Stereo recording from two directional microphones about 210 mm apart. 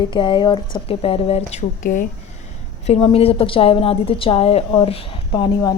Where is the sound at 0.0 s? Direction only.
20° left (ahead or behind).